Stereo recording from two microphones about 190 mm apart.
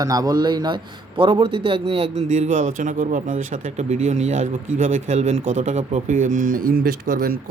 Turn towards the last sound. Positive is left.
turn(degrees=-50)  # may be behind; listen again after turning